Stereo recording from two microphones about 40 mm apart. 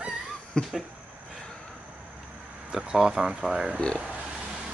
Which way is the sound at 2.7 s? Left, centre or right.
Centre.